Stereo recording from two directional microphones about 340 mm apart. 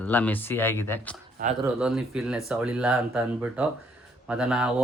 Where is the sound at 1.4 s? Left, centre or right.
Right.